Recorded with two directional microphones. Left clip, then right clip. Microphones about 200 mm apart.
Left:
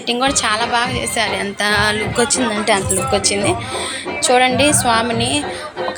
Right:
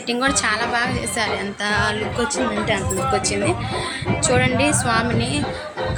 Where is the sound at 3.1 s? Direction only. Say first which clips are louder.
Left 4 dB; 10° left (ahead or behind).